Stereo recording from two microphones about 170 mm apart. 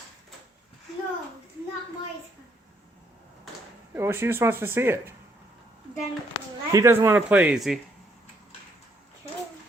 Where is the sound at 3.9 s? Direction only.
15° right (ahead or behind).